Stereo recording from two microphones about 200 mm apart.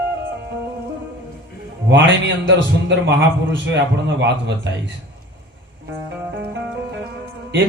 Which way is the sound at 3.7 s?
60° right (ahead or behind).